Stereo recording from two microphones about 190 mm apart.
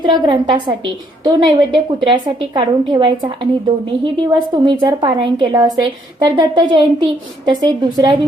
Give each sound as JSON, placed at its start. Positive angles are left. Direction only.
{"t": 0.0, "sound": "a woman's voice", "side_deg": -20}